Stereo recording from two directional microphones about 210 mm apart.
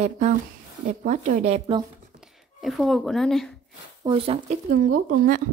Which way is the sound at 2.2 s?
Centre (ahead or behind).